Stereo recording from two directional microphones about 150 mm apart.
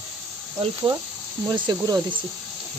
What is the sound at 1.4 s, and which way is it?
Speech, 30° right (ahead or behind).